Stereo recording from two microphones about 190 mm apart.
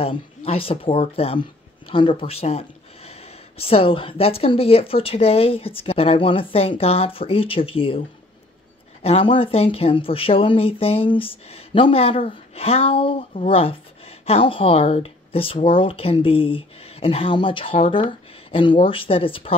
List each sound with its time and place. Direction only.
0.0 s speech: 30° left (ahead or behind)
9.0 s speech: 30° left (ahead or behind)